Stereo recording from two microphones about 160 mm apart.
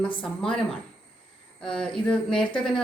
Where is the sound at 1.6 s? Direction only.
5° left (ahead or behind).